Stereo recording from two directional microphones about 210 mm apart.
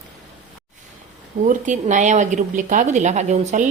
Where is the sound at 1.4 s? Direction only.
35° right (ahead or behind).